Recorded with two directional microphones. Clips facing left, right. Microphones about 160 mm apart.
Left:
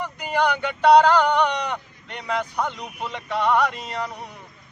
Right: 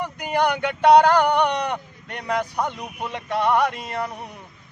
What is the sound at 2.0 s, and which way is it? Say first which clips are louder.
Speech: right 2 dB; 45° right (ahead or behind).